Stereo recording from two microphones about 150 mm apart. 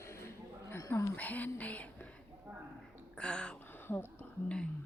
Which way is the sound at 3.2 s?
5° left (ahead or behind).